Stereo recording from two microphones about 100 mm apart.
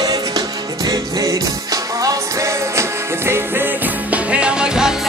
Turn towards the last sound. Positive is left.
turn(degrees=-5)  # may be behind; listen again after turning